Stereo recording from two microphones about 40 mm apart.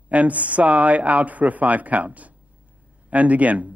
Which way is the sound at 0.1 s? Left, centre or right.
Right.